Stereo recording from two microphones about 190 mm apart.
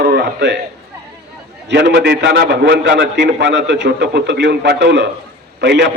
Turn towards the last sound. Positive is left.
turn(degrees=-65)  # may be behind; listen again after turning